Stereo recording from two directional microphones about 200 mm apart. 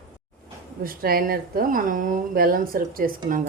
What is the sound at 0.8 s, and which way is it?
A woman's voice, 50° right (ahead or behind).